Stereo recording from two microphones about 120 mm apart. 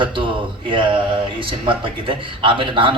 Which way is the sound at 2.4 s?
45° right (ahead or behind).